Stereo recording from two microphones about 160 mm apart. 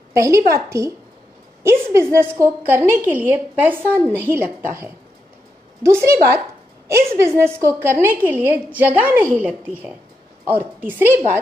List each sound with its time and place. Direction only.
0.1 s a woman's voice: 20° right (ahead or behind)